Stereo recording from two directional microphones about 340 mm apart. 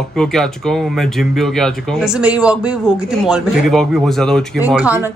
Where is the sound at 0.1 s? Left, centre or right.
Centre.